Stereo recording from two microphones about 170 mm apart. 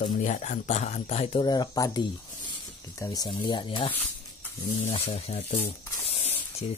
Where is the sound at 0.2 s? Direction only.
45° left (ahead or behind).